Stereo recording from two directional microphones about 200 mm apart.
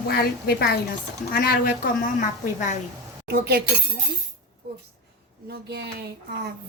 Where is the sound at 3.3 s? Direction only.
55° right (ahead or behind).